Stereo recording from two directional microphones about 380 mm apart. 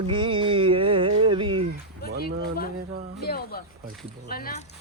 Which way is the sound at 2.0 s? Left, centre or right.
Left.